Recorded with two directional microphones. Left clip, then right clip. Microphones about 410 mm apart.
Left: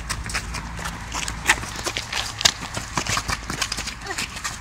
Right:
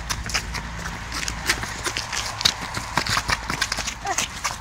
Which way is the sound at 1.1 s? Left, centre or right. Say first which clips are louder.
Left 4 dB; centre.